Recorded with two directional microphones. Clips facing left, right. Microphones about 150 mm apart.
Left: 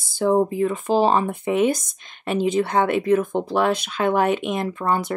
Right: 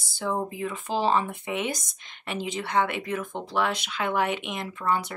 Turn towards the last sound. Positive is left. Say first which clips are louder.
# left 5 dB
turn(degrees=45)  # may be behind; listen again after turning